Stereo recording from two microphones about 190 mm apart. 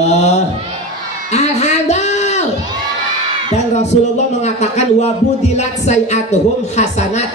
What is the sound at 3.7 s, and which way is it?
A woman's voice, 35° left (ahead or behind).